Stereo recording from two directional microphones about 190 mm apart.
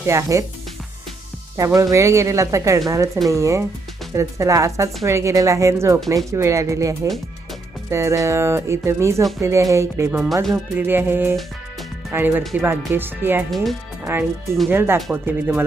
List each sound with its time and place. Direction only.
0.0 s speech: 15° right (ahead or behind)
1.5 s speech: 15° right (ahead or behind)
12.4 s speech: centre (ahead or behind)
12.6 s speech: 10° right (ahead or behind)